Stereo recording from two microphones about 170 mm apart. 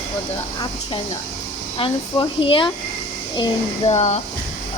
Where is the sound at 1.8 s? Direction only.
30° left (ahead or behind).